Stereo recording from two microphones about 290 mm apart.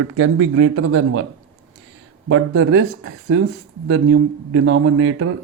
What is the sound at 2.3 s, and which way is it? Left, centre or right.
Speech, right.